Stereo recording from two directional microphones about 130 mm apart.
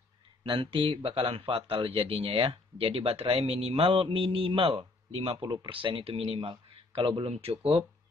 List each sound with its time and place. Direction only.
0.4 s speech: 40° right (ahead or behind)